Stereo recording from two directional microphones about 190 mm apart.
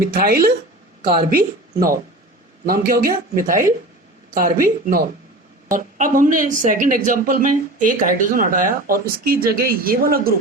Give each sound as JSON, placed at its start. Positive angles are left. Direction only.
{"t": 0.0, "sound": "a woman's voice", "side_deg": -50}